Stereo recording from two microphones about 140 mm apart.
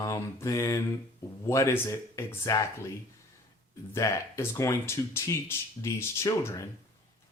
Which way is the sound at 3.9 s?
20° left (ahead or behind).